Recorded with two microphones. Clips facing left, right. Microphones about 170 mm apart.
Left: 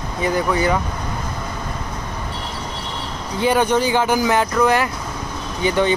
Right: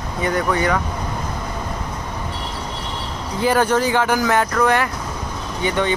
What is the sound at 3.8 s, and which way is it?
Speech, 25° left (ahead or behind).